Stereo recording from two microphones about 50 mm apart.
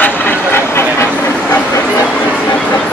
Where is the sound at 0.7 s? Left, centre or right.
Left.